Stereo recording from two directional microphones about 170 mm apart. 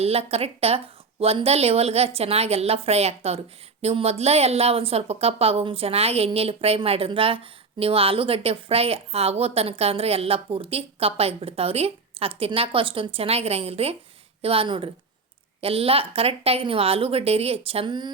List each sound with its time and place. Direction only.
0.0 s a woman's voice: 35° right (ahead or behind)